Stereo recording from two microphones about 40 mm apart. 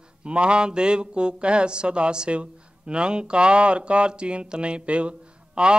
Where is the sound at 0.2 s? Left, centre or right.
Right.